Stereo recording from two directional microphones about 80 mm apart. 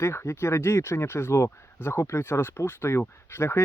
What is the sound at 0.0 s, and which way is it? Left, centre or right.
Speech, left.